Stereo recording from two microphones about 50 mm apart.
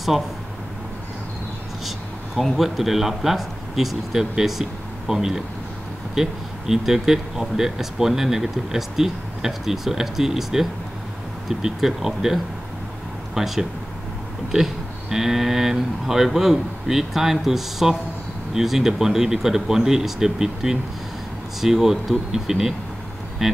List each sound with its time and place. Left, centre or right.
0.1 s speech: centre
2.5 s speech: centre
6.7 s speech: centre